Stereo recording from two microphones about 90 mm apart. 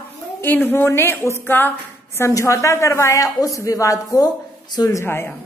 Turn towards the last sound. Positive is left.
turn(degrees=25)  # may be behind; listen again after turning